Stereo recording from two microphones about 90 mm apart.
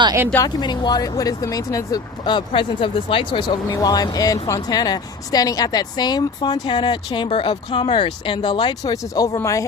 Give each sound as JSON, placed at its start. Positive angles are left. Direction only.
{"t": 0.4, "sound": "speech", "side_deg": 55}
{"t": 2.5, "sound": "speech", "side_deg": 75}
{"t": 3.8, "sound": "speech", "side_deg": 45}
{"t": 8.8, "sound": "speech", "side_deg": 45}